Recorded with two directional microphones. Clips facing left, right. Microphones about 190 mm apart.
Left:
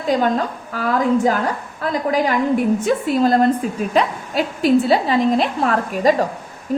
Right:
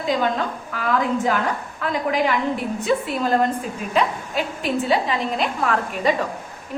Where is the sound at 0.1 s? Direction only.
40° left (ahead or behind).